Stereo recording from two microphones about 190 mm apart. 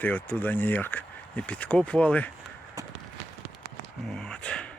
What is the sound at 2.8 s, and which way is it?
Run, 20° right (ahead or behind).